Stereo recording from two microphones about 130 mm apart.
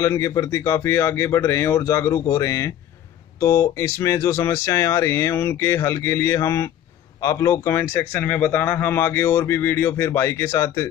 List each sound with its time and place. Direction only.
0.0 s speech: 25° left (ahead or behind)